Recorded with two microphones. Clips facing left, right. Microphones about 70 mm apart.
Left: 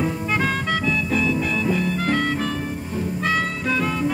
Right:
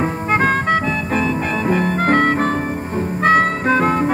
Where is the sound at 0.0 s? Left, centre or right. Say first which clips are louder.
Right 5 dB; right.